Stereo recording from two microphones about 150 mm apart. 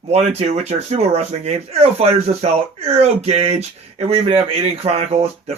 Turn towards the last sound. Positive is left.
turn(degrees=-45)  # may be behind; listen again after turning